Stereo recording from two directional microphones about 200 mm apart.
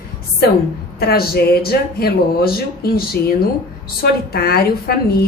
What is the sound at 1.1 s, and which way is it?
A woman's voice, 50° left (ahead or behind).